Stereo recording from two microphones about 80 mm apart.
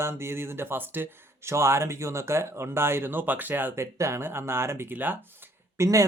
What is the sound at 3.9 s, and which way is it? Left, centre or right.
Speech, right.